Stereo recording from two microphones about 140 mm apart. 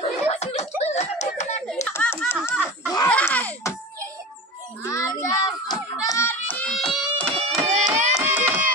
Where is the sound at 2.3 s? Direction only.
15° left (ahead or behind).